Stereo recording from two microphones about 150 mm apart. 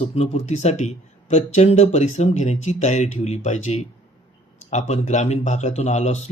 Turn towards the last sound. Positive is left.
turn(degrees=50)  # may be behind; listen again after turning